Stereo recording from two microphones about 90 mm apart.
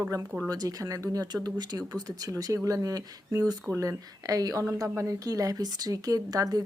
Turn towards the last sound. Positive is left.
turn(degrees=-45)  # may be behind; listen again after turning